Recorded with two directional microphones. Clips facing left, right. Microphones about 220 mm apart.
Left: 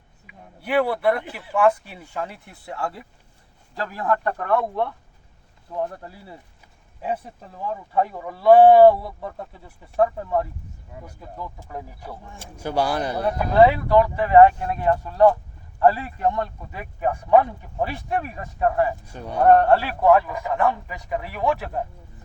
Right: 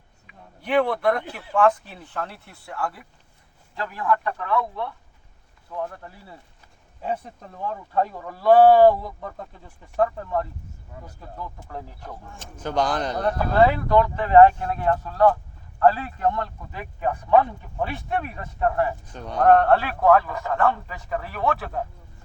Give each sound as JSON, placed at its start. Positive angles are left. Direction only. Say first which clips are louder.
{"t": 0.3, "sound": "speech", "louder": "even", "side_deg": 5}
{"t": 3.8, "sound": "speech", "louder": "left 1 dB", "side_deg": 40}
{"t": 5.7, "sound": "speech", "louder": "left 3 dB", "side_deg": 25}
{"t": 7.0, "sound": "speech", "louder": "left 1 dB", "side_deg": 10}